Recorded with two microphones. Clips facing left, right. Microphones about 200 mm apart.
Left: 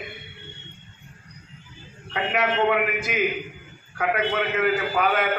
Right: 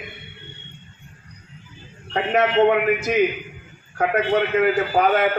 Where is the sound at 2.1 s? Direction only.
40° right (ahead or behind).